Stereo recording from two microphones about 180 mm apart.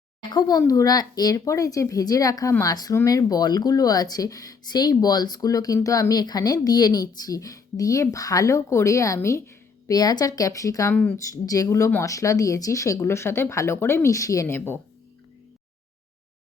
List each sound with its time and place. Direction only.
0.2 s speech: 25° left (ahead or behind)